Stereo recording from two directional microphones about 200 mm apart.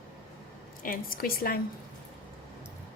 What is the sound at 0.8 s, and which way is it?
Speech, 45° left (ahead or behind).